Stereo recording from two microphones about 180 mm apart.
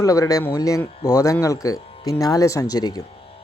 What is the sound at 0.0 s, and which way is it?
Speech, 20° left (ahead or behind).